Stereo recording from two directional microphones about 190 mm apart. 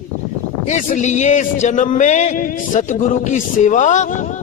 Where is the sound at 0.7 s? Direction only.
40° left (ahead or behind).